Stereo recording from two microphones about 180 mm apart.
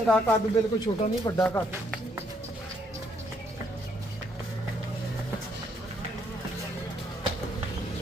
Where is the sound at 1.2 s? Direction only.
10° left (ahead or behind).